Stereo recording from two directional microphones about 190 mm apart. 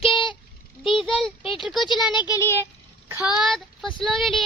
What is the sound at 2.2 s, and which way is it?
Speech, 15° left (ahead or behind).